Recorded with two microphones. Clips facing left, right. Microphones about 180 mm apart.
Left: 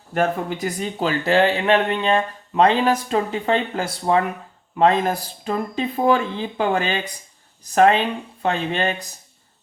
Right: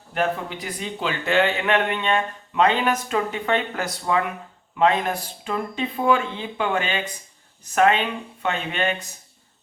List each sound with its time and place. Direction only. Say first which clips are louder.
0.1 s a man's voice: left 3 dB; 45° left (ahead or behind)